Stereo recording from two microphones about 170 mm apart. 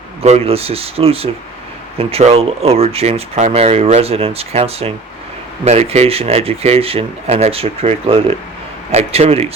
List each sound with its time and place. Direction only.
0.2 s speech: 35° right (ahead or behind)